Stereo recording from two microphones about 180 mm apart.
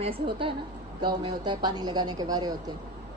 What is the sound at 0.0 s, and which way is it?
A woman's voice, 30° right (ahead or behind).